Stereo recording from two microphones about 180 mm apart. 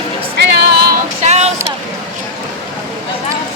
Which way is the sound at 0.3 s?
65° right (ahead or behind).